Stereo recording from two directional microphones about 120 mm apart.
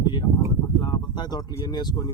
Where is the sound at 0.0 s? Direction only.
40° left (ahead or behind).